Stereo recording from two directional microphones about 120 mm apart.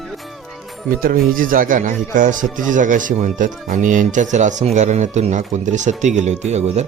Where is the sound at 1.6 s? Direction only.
90° right; by 6.9 s 65° right (ahead or behind).